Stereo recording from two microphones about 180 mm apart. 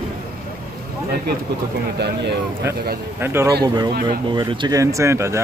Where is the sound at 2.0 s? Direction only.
70° right (ahead or behind).